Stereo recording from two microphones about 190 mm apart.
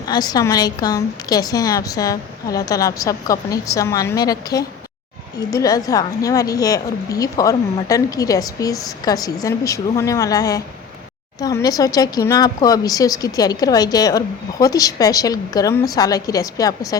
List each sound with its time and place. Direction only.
0.1 s speech: 20° left (ahead or behind)